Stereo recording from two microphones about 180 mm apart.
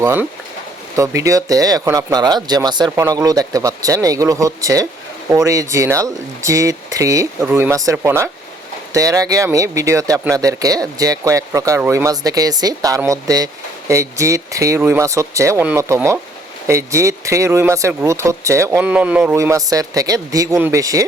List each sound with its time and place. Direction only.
0.0 s speech: 10° right (ahead or behind)